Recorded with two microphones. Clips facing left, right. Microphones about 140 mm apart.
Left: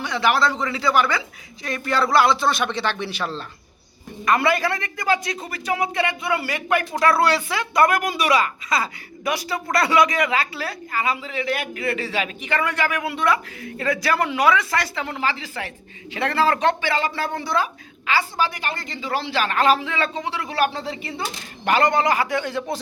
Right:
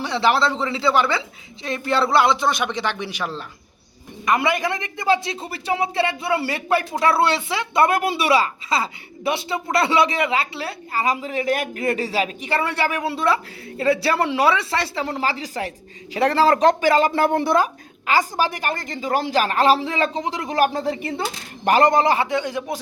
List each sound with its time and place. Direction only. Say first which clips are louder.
0.0 s a woman's voice: right 1 dB; 30° right (ahead or behind)
11.0 s speech: right 4 dB; 40° right (ahead or behind)
21.6 s a woman's voice: right 3 dB; 40° right (ahead or behind); by 22.8 s 15° right (ahead or behind)